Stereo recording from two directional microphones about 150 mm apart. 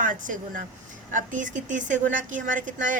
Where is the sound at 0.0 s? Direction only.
60° right (ahead or behind).